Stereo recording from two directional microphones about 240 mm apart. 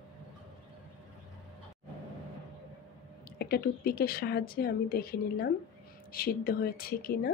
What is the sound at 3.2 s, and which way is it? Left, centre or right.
A woman's voice, left.